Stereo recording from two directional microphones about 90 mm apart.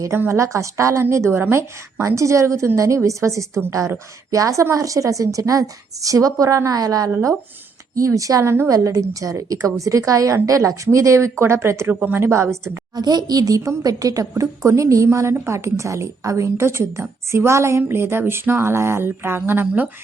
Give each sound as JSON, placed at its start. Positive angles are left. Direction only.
{"t": 0.2, "sound": "a woman's voice", "side_deg": -30}
{"t": 13.0, "sound": "a woman's voice", "side_deg": -50}